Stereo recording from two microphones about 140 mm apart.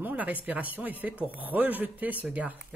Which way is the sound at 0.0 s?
10° right (ahead or behind).